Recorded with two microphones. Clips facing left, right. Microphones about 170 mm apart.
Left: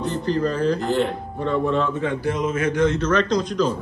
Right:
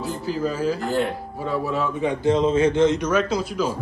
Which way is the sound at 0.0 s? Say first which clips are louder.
Left 3 dB; 5° right (ahead or behind).